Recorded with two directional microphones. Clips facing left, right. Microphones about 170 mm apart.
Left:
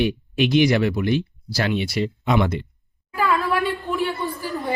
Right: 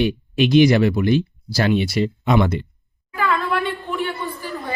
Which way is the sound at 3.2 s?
Centre (ahead or behind).